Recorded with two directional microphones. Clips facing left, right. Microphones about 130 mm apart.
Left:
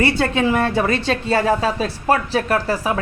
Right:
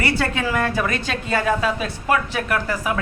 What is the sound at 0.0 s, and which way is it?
A woman's voice, 25° left (ahead or behind).